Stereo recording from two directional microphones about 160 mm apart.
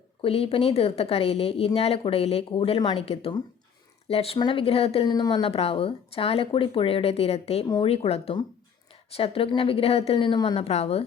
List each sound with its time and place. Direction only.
0.2 s speech: 35° left (ahead or behind)